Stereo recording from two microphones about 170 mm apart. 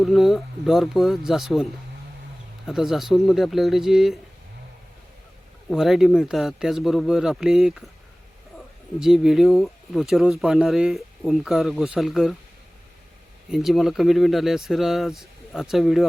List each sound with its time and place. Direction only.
0.0 s speech: centre (ahead or behind)
2.6 s speech: centre (ahead or behind)
5.7 s speech: centre (ahead or behind)
13.5 s speech: centre (ahead or behind)